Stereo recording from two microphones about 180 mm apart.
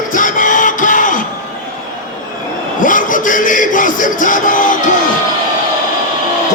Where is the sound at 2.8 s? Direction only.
45° left (ahead or behind).